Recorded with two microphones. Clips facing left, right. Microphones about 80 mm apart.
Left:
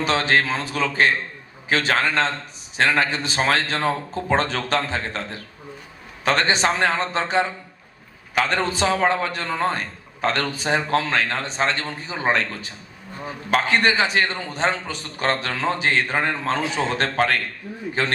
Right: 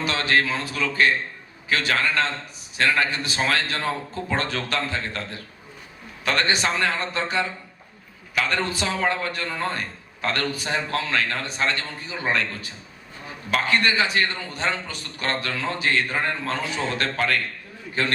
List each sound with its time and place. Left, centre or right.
0.0 s a man's voice: left
6.2 s a man's voice: left
10.2 s a man's voice: left
13.5 s a man's voice: left